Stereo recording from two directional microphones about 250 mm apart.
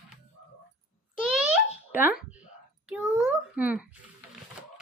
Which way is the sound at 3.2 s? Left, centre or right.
Centre.